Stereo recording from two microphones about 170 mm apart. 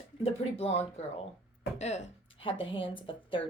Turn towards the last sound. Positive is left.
turn(degrees=30)  # may be behind; listen again after turning